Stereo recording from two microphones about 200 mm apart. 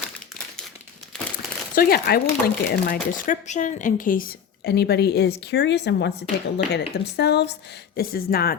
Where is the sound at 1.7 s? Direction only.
50° left (ahead or behind).